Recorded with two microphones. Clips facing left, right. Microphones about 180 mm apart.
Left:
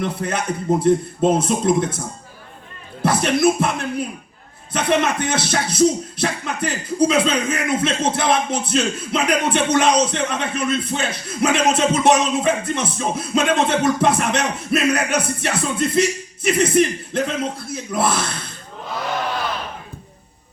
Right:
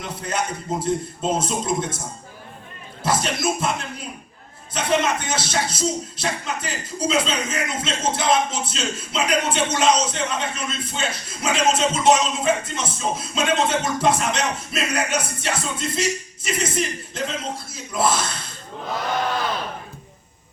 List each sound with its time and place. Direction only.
0.0 s speech: 60° left (ahead or behind)
3.0 s speech: 60° left (ahead or behind)